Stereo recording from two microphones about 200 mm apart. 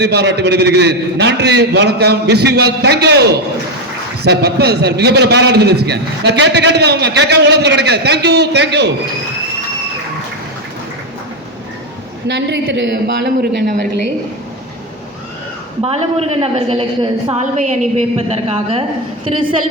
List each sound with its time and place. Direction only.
0.0 s a man's voice: 55° right (ahead or behind)
4.2 s a man's voice: 55° right (ahead or behind)
12.3 s a man's voice: 60° right (ahead or behind)
15.8 s a woman's voice: 30° right (ahead or behind)